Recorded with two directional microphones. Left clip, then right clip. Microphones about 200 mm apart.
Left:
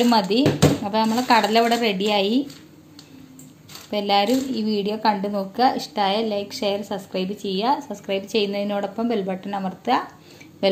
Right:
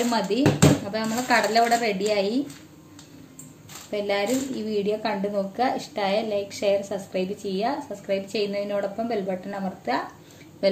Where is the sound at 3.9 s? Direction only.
40° left (ahead or behind).